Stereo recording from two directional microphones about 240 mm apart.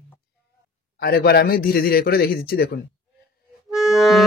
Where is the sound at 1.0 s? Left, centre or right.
Left.